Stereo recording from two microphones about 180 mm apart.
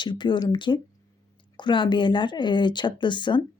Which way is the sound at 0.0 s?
25° left (ahead or behind).